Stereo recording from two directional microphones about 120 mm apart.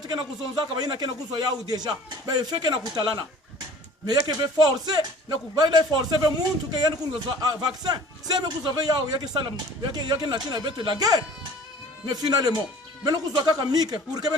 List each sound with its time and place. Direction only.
0.0 s speech: 35° right (ahead or behind)
4.3 s speech: 35° right (ahead or behind)